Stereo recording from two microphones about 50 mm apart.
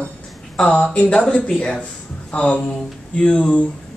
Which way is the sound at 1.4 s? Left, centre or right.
Centre.